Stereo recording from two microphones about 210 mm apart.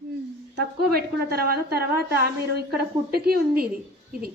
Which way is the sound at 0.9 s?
45° right (ahead or behind).